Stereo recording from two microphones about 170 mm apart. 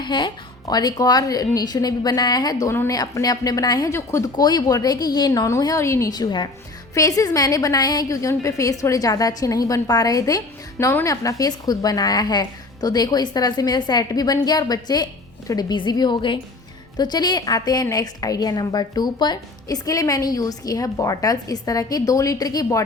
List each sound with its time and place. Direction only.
0.0 s a woman's voice: 25° left (ahead or behind)